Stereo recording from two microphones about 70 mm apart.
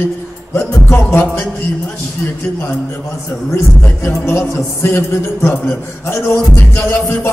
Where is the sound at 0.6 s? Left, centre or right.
Left.